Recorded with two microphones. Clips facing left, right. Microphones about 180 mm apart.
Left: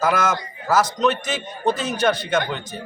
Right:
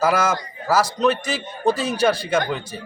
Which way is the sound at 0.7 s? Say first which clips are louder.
Even; 5° right (ahead or behind).